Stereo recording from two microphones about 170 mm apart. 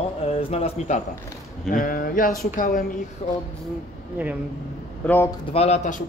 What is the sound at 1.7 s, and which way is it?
Speech, 55° left (ahead or behind).